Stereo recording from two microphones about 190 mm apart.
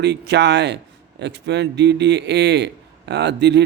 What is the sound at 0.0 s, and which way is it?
Speech, 60° right (ahead or behind).